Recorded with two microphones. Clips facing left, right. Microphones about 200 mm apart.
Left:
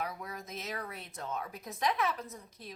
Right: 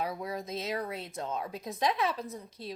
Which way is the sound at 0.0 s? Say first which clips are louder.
Right 5 dB; 30° right (ahead or behind).